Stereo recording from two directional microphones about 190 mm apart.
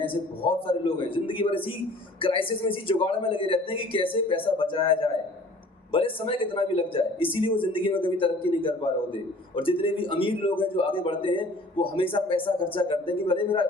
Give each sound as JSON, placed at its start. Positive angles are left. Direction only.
{"t": 0.0, "sound": "speech", "side_deg": 25}